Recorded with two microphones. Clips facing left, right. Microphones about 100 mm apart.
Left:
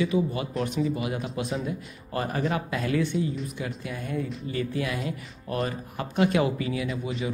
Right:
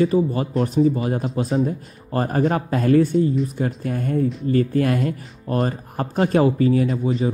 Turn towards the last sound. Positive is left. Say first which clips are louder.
# right 9 dB
turn(degrees=-40)  # may be behind; listen again after turning